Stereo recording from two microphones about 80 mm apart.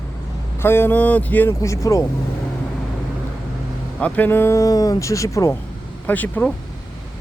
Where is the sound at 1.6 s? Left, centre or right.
Left.